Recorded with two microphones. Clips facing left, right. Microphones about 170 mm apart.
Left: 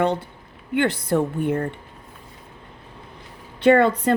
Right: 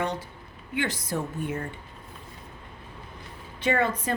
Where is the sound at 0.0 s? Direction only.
60° left (ahead or behind).